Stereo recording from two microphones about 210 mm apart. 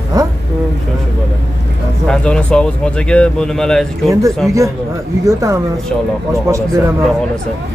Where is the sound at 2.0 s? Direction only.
5° left (ahead or behind).